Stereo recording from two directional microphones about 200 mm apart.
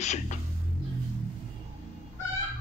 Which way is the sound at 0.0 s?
35° left (ahead or behind).